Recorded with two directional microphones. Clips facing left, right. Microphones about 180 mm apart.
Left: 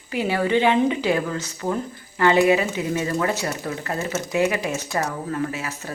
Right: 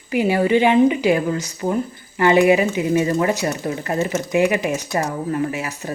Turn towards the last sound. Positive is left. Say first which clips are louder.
# right 4 dB
turn(degrees=-15)  # may be behind; listen again after turning